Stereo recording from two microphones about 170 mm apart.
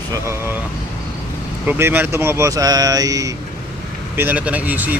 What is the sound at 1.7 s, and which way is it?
Speech, 10° right (ahead or behind).